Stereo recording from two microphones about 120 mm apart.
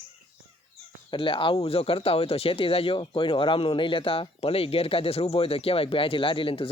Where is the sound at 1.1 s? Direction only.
45° left (ahead or behind).